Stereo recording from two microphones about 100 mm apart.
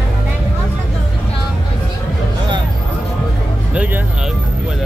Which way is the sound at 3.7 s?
15° right (ahead or behind).